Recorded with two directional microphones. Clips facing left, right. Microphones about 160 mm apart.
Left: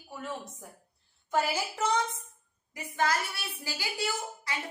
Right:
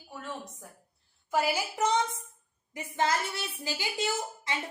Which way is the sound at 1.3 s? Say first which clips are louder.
Right 1 dB; 15° right (ahead or behind).